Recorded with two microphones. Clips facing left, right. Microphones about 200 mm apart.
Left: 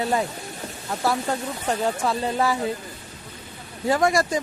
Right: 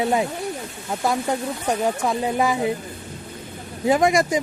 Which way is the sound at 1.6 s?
15° right (ahead or behind).